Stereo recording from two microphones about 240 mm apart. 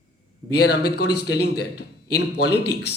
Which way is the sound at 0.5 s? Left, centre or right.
Left.